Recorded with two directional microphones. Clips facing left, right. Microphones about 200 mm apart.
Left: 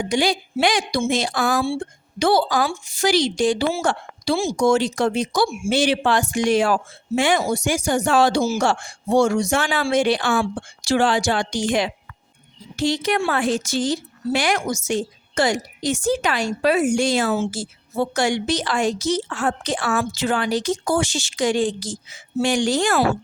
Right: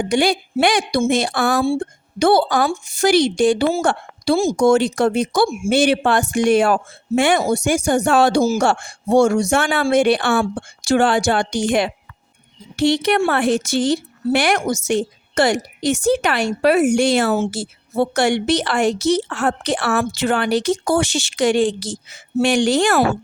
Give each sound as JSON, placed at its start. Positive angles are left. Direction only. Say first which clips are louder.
{"t": 0.0, "sound": "a woman's voice", "louder": "right 3 dB", "side_deg": -55}
{"t": 1.6, "sound": "a woman's voice", "louder": "right 5 dB", "side_deg": -45}
{"t": 4.6, "sound": "a woman's voice", "louder": "right 2 dB", "side_deg": -55}
{"t": 10.4, "sound": "a woman's voice", "louder": "right 3 dB", "side_deg": -50}
{"t": 13.1, "sound": "a woman's voice", "louder": "right 4 dB", "side_deg": -65}